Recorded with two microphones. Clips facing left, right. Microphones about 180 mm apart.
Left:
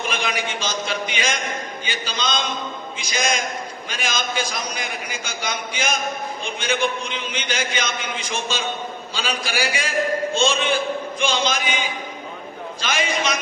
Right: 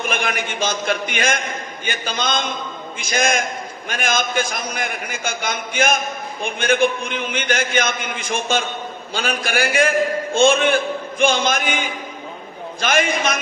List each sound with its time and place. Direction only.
0.1 s a man's voice: 55° right (ahead or behind)